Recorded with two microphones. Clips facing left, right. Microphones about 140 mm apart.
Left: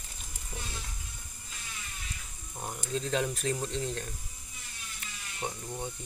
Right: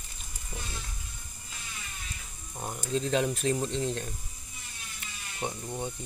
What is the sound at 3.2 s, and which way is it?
Speech, 20° right (ahead or behind).